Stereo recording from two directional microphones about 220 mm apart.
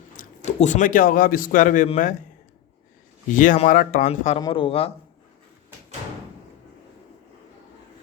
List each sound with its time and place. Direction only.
0.1 s a man's voice: 35° left (ahead or behind)
3.3 s a man's voice: 35° left (ahead or behind)